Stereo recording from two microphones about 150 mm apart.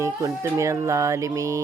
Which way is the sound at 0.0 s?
20° right (ahead or behind).